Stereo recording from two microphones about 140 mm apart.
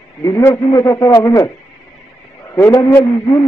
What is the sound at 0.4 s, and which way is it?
Radio, 20° left (ahead or behind).